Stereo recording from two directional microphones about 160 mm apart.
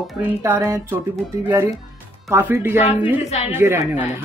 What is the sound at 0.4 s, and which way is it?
Speech, 15° right (ahead or behind).